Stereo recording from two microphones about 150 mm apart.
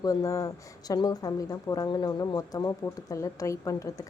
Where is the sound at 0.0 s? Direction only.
25° left (ahead or behind).